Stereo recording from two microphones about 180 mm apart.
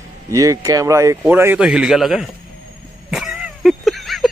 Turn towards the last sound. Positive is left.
turn(degrees=0)  # may be behind; listen again after turning